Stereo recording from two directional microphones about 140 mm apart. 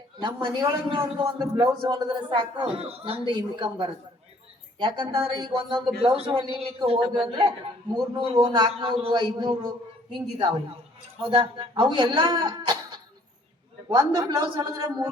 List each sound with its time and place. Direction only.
0.2 s a man's voice: 35° right (ahead or behind)
11.2 s a man's voice: 40° right (ahead or behind)